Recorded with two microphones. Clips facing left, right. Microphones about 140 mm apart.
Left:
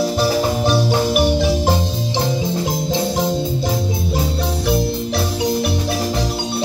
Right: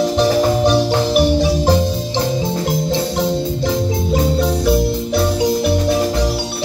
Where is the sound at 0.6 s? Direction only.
10° left (ahead or behind).